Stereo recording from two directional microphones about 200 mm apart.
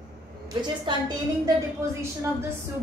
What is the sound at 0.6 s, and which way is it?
A woman's voice, 20° right (ahead or behind).